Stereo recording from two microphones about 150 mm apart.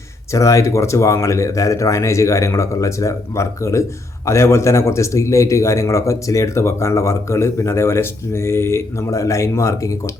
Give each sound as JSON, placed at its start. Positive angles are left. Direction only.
{"t": 0.3, "sound": "a man's voice", "side_deg": 20}